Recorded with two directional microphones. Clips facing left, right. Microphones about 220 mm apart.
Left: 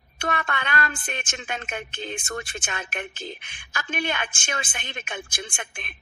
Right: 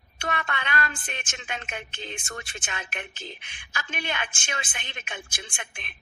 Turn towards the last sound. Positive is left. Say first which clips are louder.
# left 5 dB
turn(degrees=50)  # may be behind; listen again after turning